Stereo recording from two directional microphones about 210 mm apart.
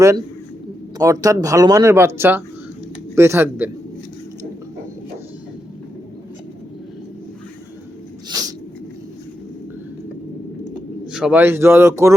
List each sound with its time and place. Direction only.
0.9 s speech: 15° right (ahead or behind)
8.3 s a sound: 15° right (ahead or behind)
11.1 s speech: 5° right (ahead or behind)